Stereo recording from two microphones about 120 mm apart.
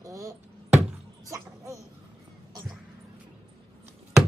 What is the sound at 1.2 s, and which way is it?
Speech, 25° right (ahead or behind).